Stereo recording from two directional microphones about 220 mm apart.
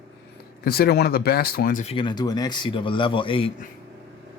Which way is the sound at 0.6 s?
45° left (ahead or behind).